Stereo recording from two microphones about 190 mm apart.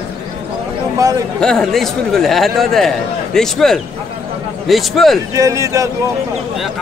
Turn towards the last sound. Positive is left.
turn(degrees=-15)  # may be behind; listen again after turning